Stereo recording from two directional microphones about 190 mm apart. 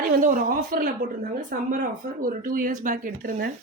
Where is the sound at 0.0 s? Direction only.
45° right (ahead or behind).